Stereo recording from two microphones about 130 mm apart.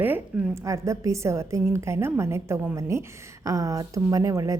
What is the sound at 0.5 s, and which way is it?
A woman's voice, 25° right (ahead or behind).